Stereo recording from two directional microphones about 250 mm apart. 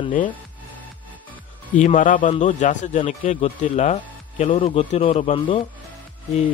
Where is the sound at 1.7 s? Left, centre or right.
Left.